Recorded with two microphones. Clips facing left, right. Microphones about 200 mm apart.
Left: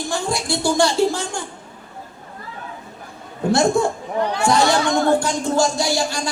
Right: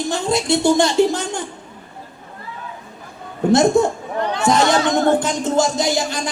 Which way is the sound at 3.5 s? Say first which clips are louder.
Right 3 dB; 20° right (ahead or behind).